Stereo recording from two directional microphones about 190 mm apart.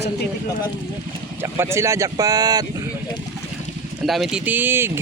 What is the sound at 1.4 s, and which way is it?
Speech, 15° right (ahead or behind).